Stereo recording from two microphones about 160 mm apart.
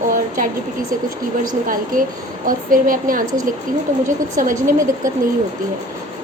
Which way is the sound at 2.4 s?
60° right (ahead or behind).